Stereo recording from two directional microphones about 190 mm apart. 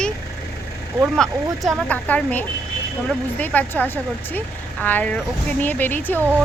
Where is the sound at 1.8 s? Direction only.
10° left (ahead or behind).